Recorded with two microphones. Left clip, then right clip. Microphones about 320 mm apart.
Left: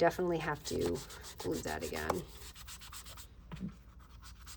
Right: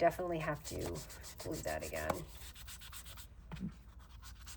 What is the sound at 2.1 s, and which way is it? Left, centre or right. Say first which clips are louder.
Sanding: left 3 dB; centre.